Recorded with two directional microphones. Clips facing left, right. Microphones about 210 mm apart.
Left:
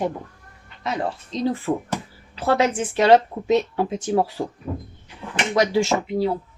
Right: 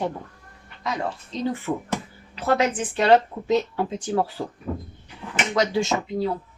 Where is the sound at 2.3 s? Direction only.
30° left (ahead or behind).